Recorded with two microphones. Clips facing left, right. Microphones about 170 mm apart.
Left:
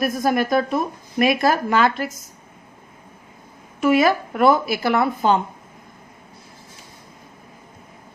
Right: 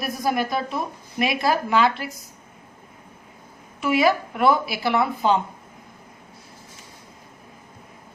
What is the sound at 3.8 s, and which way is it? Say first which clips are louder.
A woman's voice: left 3 dB; 45° left (ahead or behind).